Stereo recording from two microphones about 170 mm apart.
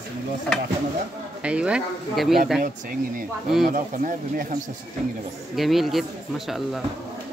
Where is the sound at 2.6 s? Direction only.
55° right (ahead or behind).